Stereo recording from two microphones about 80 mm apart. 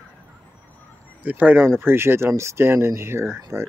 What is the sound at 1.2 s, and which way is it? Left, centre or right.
Speech, centre.